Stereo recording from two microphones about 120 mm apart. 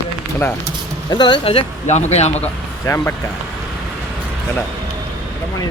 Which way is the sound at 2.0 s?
65° left (ahead or behind).